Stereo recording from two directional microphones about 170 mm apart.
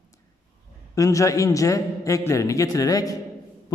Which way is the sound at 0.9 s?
20° left (ahead or behind).